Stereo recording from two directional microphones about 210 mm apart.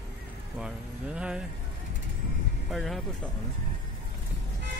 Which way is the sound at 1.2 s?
5° right (ahead or behind).